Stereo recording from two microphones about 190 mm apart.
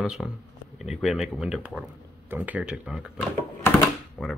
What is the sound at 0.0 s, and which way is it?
Speech, 5° right (ahead or behind).